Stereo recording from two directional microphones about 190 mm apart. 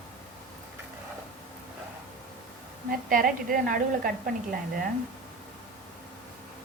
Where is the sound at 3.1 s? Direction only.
45° right (ahead or behind).